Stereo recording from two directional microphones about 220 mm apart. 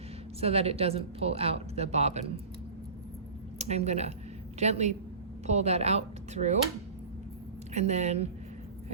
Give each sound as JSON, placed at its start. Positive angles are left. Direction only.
{"t": 0.3, "sound": "a woman's voice", "side_deg": -25}
{"t": 3.6, "sound": "a woman's voice", "side_deg": -30}
{"t": 7.7, "sound": "speech", "side_deg": -30}